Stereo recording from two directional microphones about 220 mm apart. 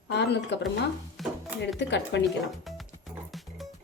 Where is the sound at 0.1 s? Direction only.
50° left (ahead or behind).